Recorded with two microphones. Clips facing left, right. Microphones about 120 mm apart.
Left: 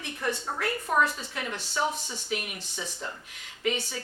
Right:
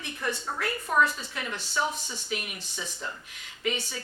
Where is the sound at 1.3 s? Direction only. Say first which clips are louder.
Even; 45° left (ahead or behind).